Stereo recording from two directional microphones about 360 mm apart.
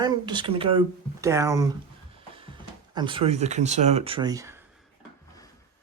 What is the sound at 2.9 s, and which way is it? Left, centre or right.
Speech, centre.